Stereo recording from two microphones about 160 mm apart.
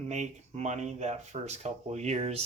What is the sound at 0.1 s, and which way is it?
Speech, 45° right (ahead or behind).